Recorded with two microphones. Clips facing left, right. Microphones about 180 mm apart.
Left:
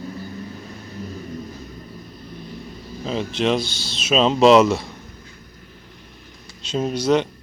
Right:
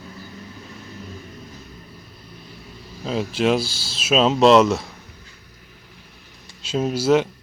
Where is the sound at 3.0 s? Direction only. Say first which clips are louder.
Right 1 dB; 5° right (ahead or behind).